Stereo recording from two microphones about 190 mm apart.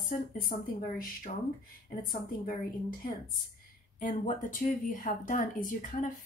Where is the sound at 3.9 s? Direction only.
40° left (ahead or behind).